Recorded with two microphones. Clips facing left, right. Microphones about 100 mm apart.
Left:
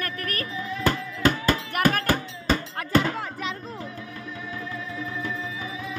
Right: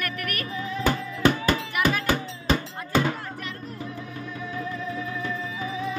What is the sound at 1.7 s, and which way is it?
Music, 50° left (ahead or behind).